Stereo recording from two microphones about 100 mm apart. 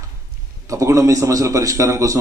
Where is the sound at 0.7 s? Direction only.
30° right (ahead or behind).